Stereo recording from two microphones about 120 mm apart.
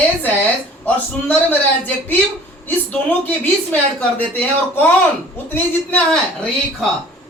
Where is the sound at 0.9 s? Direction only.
15° left (ahead or behind).